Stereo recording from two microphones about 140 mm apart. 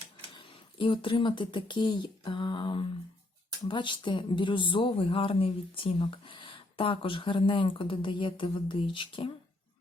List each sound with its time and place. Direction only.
0.3 s speech: 35° left (ahead or behind)